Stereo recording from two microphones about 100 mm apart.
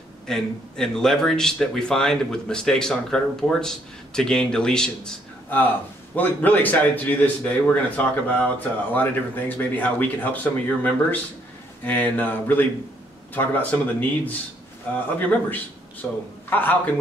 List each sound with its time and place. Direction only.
0.3 s a man's voice: 5° left (ahead or behind)
6.1 s a man's voice: 20° left (ahead or behind)